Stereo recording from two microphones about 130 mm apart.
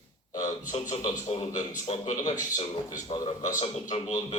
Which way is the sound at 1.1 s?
45° left (ahead or behind).